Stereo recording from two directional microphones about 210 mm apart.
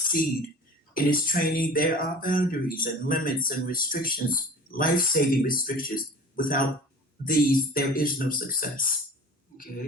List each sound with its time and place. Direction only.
0.9 s speech: 40° left (ahead or behind)